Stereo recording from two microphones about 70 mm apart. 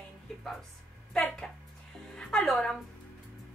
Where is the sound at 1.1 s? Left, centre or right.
Centre.